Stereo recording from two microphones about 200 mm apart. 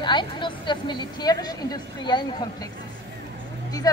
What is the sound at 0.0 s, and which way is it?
A woman's voice, 25° left (ahead or behind).